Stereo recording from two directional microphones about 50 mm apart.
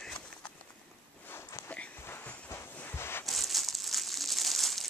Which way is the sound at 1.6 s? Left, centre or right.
Left.